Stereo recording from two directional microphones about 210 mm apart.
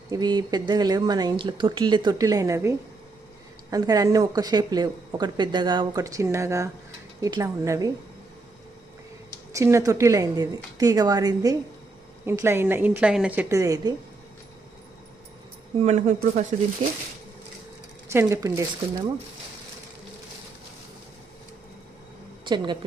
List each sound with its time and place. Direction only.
0.1 s a woman's voice: 20° right (ahead or behind)
9.5 s a woman's voice: 15° right (ahead or behind)
15.8 s speech: 35° right (ahead or behind)
18.1 s a woman's voice: 15° right (ahead or behind)
22.4 s speech: 20° right (ahead or behind)